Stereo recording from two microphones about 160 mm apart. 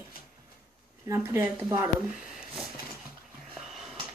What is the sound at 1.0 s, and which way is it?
Speech, 20° right (ahead or behind).